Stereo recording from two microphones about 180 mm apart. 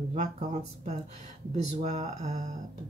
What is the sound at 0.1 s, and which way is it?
Speech, 40° right (ahead or behind).